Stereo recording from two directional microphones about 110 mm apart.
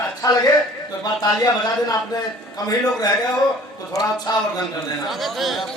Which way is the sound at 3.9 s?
35° left (ahead or behind).